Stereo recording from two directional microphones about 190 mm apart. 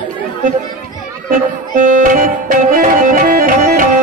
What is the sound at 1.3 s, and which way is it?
Music, 45° right (ahead or behind).